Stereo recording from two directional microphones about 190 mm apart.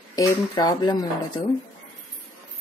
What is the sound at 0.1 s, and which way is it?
Speech, 20° left (ahead or behind).